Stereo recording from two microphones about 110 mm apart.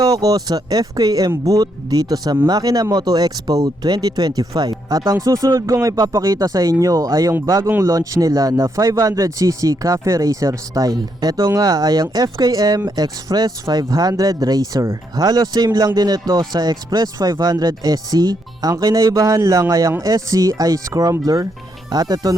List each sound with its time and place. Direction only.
0.0 s speech: 35° right (ahead or behind)